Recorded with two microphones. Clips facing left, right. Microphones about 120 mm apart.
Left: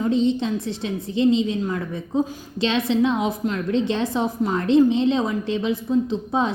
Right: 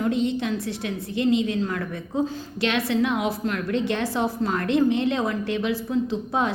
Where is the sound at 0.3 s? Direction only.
20° left (ahead or behind).